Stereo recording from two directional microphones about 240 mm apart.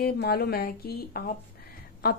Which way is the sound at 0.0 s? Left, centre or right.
Left.